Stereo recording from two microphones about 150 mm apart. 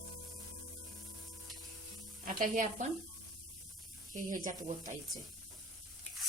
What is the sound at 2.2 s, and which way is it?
Speech, 60° right (ahead or behind).